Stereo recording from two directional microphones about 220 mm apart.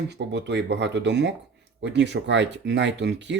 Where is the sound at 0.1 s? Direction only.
50° right (ahead or behind).